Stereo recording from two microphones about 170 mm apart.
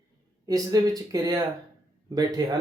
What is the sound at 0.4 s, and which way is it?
Speech, 20° right (ahead or behind).